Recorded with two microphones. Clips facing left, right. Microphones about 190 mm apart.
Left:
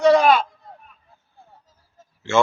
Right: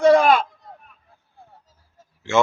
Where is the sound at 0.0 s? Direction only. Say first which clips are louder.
Even; 50° right (ahead or behind).